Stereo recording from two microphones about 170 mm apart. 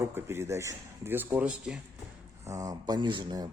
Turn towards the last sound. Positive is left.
turn(degrees=-25)  # may be behind; listen again after turning